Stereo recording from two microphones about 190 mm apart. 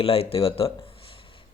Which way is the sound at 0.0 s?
30° left (ahead or behind).